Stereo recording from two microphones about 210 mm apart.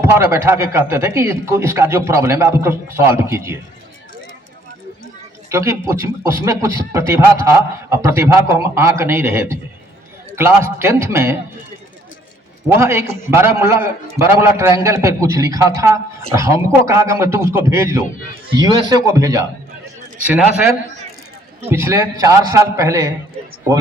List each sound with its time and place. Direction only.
0.0 s speech: 10° right (ahead or behind)
5.5 s speech: 15° right (ahead or behind)
12.6 s speech: 10° right (ahead or behind)
21.7 s speech: 15° right (ahead or behind)